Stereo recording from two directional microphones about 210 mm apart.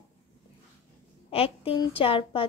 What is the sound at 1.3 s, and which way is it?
A woman's voice, 25° left (ahead or behind).